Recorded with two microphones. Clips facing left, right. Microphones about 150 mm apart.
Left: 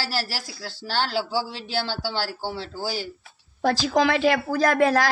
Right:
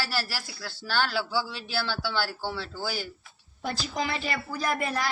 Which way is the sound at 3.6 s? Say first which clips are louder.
Left 10 dB; 90° left.